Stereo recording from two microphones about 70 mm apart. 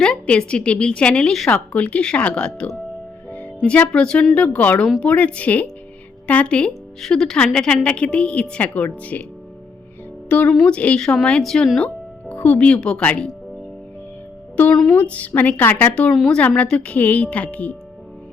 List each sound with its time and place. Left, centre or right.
0.0 s a woman's voice: centre
3.2 s music: left
3.7 s a woman's voice: centre
10.2 s a woman's voice: centre
12.3 s speech: left
13.0 s music: centre
14.7 s a woman's voice: centre
14.9 s speech: left